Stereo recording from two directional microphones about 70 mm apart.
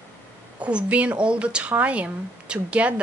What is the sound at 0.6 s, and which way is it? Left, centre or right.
A woman's voice, centre.